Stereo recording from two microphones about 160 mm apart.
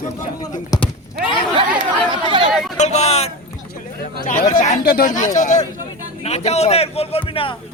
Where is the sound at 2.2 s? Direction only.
30° right (ahead or behind).